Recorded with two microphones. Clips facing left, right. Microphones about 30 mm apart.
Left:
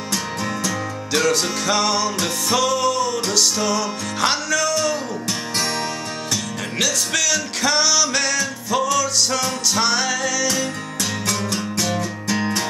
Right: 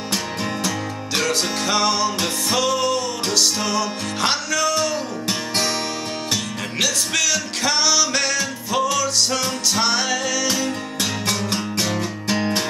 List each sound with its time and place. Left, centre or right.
0.7 s music: centre
6.8 s music: centre
11.0 s music: right